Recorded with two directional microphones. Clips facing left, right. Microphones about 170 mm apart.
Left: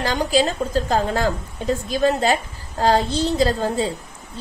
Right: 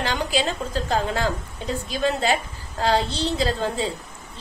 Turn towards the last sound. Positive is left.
turn(degrees=40)  # may be behind; listen again after turning